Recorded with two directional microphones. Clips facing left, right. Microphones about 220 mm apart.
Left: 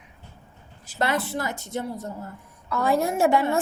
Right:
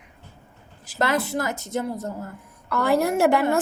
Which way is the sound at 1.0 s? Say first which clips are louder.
Right 2 dB; 45° right (ahead or behind).